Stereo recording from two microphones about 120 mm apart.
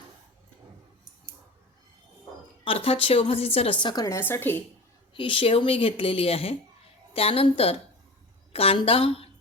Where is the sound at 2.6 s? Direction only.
50° left (ahead or behind).